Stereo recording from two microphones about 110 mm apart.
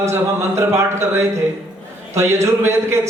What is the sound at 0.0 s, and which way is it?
Speech, 25° right (ahead or behind).